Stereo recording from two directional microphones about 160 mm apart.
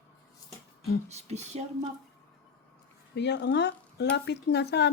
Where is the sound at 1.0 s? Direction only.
45° right (ahead or behind).